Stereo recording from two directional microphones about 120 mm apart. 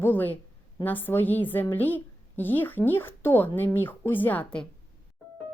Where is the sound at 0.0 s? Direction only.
15° left (ahead or behind).